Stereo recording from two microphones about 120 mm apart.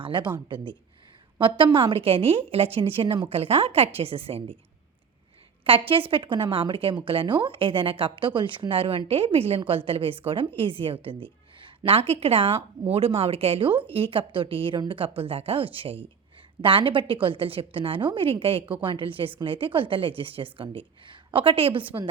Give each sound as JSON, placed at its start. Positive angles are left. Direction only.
{"t": 0.0, "sound": "speech", "side_deg": -40}
{"t": 5.9, "sound": "a woman's voice", "side_deg": -50}